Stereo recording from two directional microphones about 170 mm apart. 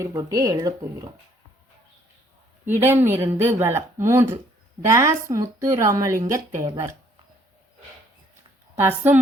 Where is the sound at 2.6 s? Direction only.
15° right (ahead or behind).